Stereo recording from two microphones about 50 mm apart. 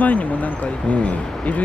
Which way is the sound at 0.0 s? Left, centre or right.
Left.